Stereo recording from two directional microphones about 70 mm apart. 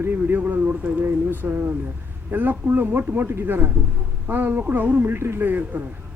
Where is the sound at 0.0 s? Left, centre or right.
Right.